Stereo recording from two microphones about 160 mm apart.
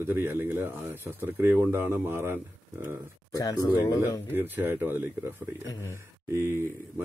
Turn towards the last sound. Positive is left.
turn(degrees=-15)  # may be behind; listen again after turning